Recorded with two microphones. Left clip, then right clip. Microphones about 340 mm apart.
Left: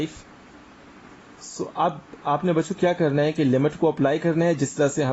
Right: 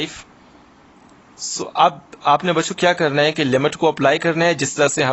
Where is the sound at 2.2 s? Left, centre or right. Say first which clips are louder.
Right 7 dB; right.